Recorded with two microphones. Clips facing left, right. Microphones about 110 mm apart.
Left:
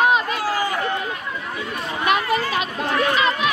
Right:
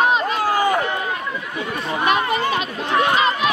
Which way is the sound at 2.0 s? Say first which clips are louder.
Right 1 dB; 30° right (ahead or behind).